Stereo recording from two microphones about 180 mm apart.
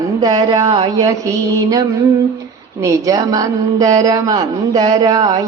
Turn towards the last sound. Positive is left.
turn(degrees=-20)  # may be behind; listen again after turning